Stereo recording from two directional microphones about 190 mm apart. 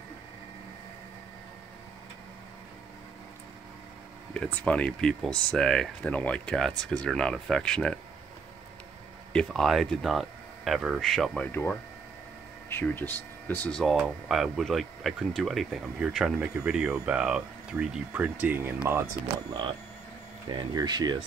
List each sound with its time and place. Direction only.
4.3 s speech: 5° left (ahead or behind)
9.3 s speech: 5° left (ahead or behind); by 21.2 s 20° right (ahead or behind)